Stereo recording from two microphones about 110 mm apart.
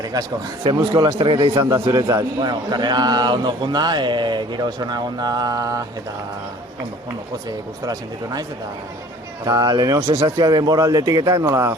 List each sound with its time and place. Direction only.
0.0 s a man's voice: 35° right (ahead or behind)
1.9 s speech: 35° right (ahead or behind)
7.9 s speech: 35° right (ahead or behind)
9.5 s speech: 35° right (ahead or behind)